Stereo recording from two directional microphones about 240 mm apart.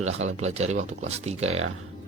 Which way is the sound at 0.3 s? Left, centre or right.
Right.